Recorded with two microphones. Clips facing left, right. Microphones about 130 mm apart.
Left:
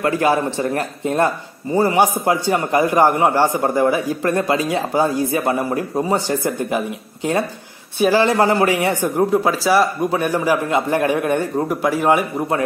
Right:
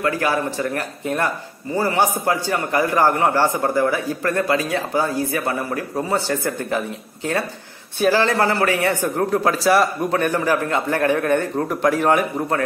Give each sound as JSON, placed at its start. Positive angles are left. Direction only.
{"t": 0.0, "sound": "a man's voice", "side_deg": 20}
{"t": 8.0, "sound": "a man's voice", "side_deg": 15}